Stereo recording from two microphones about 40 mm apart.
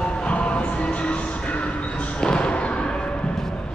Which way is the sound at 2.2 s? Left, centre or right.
Left.